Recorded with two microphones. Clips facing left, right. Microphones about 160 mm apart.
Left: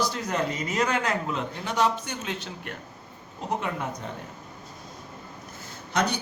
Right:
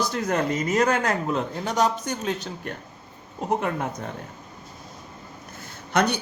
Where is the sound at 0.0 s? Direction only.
50° right (ahead or behind).